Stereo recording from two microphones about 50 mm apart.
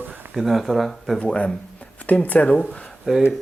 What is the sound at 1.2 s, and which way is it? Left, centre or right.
Speech, left.